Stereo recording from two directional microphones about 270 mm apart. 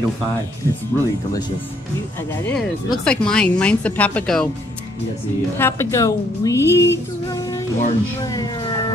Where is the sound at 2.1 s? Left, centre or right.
Centre.